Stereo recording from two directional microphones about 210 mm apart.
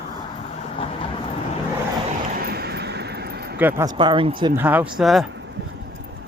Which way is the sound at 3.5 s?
10° right (ahead or behind).